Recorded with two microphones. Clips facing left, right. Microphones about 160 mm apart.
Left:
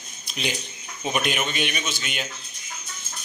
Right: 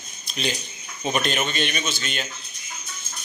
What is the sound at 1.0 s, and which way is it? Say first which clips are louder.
A man's voice: right 1 dB; 10° left (ahead or behind).